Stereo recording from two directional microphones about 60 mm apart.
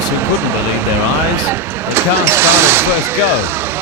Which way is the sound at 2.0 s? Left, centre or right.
Right.